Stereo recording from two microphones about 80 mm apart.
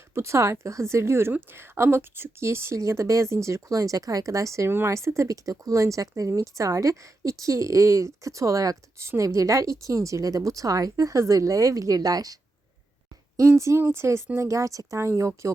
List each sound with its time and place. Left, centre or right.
0.1 s a woman's voice: right
13.6 s a woman's voice: right